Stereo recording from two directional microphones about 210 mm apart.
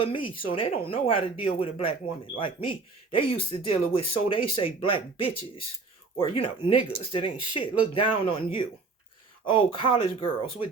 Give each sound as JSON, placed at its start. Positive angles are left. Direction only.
{"t": 0.0, "sound": "speech", "side_deg": 25}